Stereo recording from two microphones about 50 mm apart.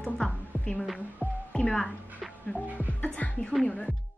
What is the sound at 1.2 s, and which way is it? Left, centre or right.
Music, right.